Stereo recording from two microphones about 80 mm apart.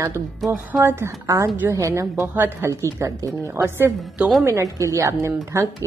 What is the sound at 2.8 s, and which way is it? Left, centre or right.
Speech, right.